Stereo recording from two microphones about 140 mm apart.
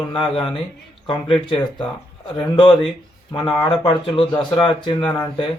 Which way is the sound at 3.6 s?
35° left (ahead or behind).